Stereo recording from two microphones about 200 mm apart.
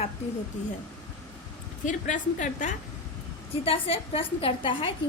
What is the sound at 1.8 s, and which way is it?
Speech, 40° left (ahead or behind).